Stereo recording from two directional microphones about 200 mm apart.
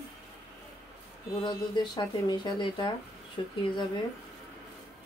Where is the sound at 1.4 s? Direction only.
25° left (ahead or behind).